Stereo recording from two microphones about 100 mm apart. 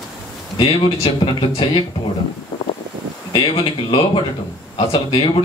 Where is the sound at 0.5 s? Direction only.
60° left (ahead or behind).